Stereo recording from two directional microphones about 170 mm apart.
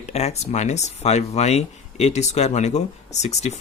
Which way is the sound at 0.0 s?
40° left (ahead or behind).